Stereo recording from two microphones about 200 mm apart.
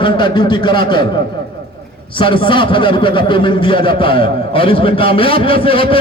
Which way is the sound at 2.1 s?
25° left (ahead or behind).